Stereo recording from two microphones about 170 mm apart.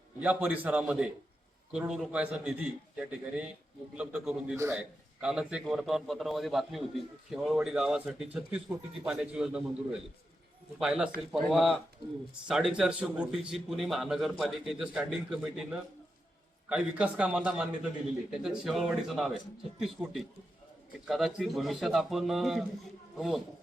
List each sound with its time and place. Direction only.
0.2 s a man's voice: 10° right (ahead or behind)
4.5 s a man's voice: 15° right (ahead or behind)
5.2 s a man's voice: 5° right (ahead or behind)
8.7 s a man's voice: 15° right (ahead or behind)
9.0 s a man's voice: 5° right (ahead or behind)
10.8 s a man's voice: 5° right (ahead or behind)